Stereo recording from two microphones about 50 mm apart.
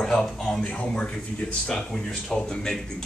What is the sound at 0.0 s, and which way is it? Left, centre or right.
Speech, centre.